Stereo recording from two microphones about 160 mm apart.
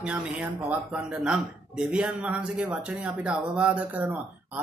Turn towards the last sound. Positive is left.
turn(degrees=-10)  # may be behind; listen again after turning